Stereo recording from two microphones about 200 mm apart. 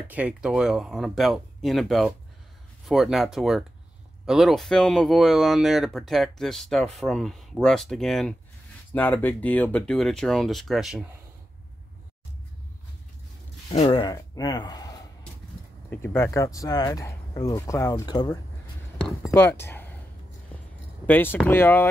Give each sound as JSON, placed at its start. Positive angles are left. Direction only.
{"t": 0.1, "sound": "speech", "side_deg": -5}
{"t": 13.7, "sound": "speech", "side_deg": 25}
{"t": 18.9, "sound": "speech", "side_deg": 0}
{"t": 19.3, "sound": "speech", "side_deg": 10}
{"t": 21.1, "sound": "speech", "side_deg": 10}